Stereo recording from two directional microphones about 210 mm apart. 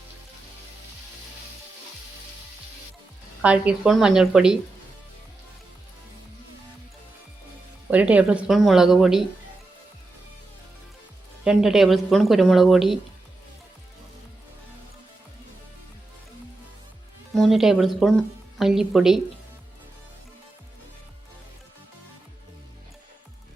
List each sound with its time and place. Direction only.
3.4 s speech: 5° right (ahead or behind)
7.9 s speech: 5° right (ahead or behind)
11.4 s speech: centre (ahead or behind)
17.3 s speech: centre (ahead or behind)